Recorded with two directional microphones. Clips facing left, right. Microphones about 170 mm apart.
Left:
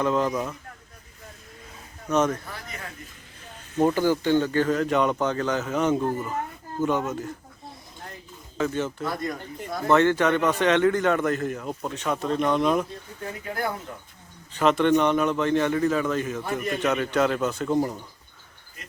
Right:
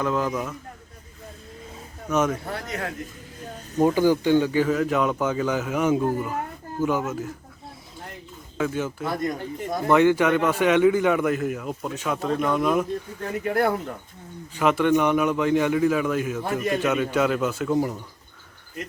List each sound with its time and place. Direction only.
0.0 s a man's voice: centre (ahead or behind)
2.0 s speech: 5° right (ahead or behind)
2.4 s speech: 65° right (ahead or behind)
3.9 s speech: 15° right (ahead or behind)
8.5 s speech: 5° right (ahead or behind)
9.0 s a man's voice: 20° right (ahead or behind); by 12.8 s 5° right (ahead or behind)
14.5 s a man's voice: 10° right (ahead or behind)